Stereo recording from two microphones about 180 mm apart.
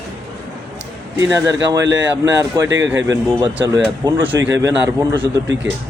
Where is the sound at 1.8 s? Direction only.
90° right.